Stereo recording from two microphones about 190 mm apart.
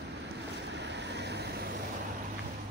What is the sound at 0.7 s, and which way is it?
Vehicle, 65° right (ahead or behind).